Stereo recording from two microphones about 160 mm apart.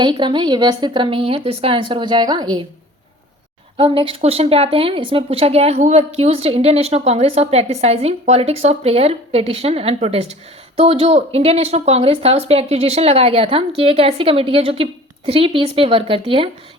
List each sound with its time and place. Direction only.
0.0 s a woman's voice: 30° right (ahead or behind)
3.8 s speech: 35° right (ahead or behind)